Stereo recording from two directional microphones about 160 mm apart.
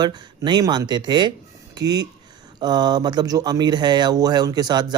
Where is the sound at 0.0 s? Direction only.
25° right (ahead or behind).